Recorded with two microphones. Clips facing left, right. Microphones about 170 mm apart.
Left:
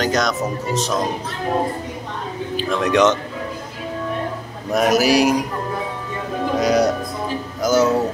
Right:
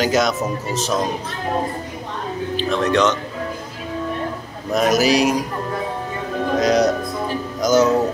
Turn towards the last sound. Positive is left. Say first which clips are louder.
# right 1 dB
turn(degrees=5)  # may be behind; listen again after turning